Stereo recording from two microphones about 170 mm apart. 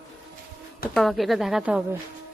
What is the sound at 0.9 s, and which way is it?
Speech, centre (ahead or behind).